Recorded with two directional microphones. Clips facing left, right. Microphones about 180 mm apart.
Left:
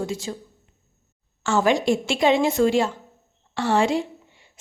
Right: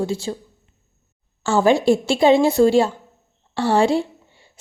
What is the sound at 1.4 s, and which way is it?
A woman's voice, 30° right (ahead or behind).